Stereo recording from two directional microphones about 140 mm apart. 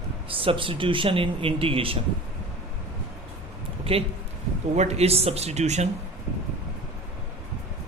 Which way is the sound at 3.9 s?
40° right (ahead or behind).